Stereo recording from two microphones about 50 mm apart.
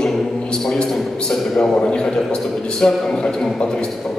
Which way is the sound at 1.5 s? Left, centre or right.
Centre.